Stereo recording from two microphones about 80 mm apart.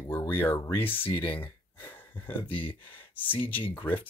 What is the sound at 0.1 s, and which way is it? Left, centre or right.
Speech, left.